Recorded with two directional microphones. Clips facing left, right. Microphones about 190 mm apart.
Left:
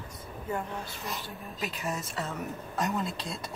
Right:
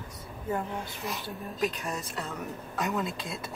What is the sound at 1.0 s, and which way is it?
Speech, centre (ahead or behind).